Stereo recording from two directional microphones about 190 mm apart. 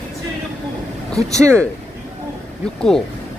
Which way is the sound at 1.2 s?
15° right (ahead or behind).